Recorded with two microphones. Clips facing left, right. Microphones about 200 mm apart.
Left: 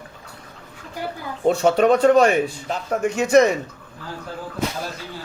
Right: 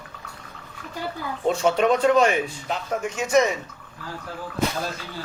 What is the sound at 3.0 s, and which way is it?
Speech, 60° left (ahead or behind).